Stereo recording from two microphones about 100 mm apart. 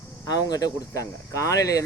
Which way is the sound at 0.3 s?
40° left (ahead or behind).